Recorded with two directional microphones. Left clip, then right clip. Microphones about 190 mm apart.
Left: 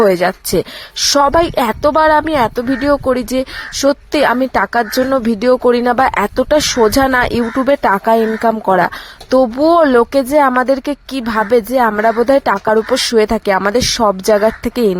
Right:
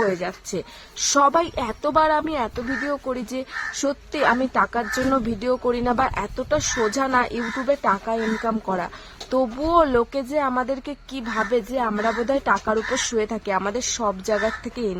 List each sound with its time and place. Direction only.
0.0 s a woman's voice: 45° left (ahead or behind)